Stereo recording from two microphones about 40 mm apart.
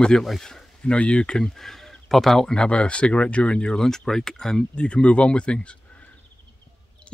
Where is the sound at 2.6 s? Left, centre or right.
Left.